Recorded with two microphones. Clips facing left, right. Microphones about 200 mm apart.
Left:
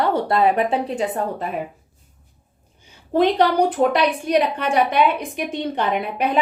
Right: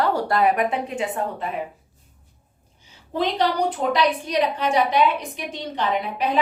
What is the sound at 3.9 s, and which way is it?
A woman's voice, 55° left (ahead or behind).